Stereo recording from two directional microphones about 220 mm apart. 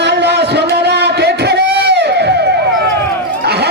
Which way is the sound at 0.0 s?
50° right (ahead or behind).